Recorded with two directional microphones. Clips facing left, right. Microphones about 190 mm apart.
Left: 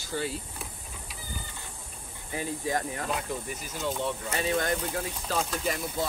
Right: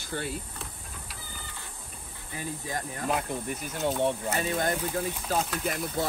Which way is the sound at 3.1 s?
55° right (ahead or behind).